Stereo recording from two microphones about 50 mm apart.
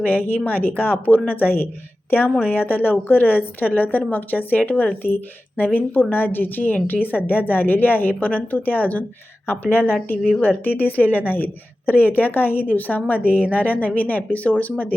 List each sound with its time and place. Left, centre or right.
0.0 s a woman's voice: left
9.5 s a woman's voice: left